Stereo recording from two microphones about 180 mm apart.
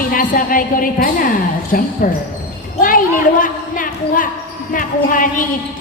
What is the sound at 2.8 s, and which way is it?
Basketball bounce, 50° left (ahead or behind).